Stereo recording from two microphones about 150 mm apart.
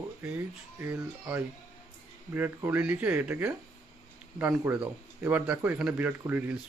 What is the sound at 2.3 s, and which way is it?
Speech, 15° right (ahead or behind).